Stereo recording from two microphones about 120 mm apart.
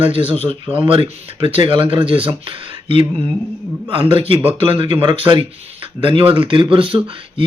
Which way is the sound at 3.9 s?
45° right (ahead or behind).